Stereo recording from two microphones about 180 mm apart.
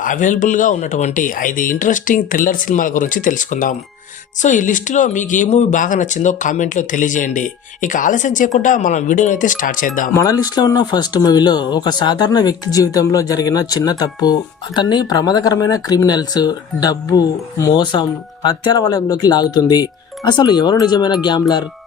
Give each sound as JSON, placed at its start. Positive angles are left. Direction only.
{"t": 0.0, "sound": "speech", "side_deg": 45}
{"t": 10.2, "sound": "speech", "side_deg": 20}